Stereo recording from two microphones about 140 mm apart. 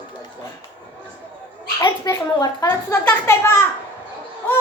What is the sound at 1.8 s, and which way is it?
A woman's voice, 30° left (ahead or behind).